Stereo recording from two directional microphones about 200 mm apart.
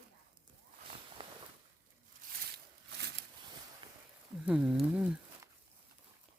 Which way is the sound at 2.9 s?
55° right (ahead or behind).